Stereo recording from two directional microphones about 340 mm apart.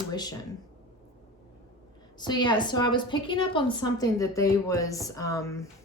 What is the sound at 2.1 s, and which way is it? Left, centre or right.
A woman's voice, centre.